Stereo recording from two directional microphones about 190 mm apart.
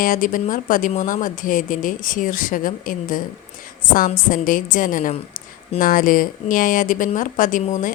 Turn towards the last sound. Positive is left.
turn(degrees=45)  # may be behind; listen again after turning